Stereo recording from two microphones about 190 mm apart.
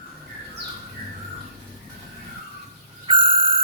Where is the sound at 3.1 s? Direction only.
25° right (ahead or behind).